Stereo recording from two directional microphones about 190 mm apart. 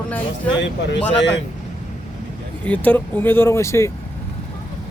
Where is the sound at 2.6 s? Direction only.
5° left (ahead or behind).